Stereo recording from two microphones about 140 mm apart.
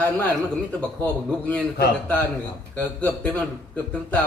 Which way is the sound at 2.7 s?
10° left (ahead or behind).